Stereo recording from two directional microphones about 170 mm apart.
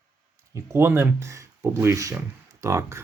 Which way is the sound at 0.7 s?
15° right (ahead or behind).